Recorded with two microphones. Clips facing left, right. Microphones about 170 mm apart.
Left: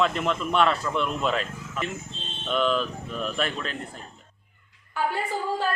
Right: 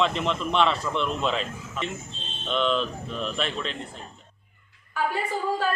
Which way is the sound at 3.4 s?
50° left (ahead or behind).